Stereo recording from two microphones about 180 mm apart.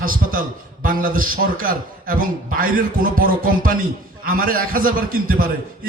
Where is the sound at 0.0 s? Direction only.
50° right (ahead or behind).